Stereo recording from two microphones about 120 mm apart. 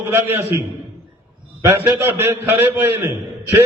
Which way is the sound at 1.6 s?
25° right (ahead or behind).